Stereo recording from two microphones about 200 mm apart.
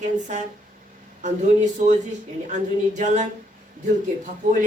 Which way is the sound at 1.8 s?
35° right (ahead or behind).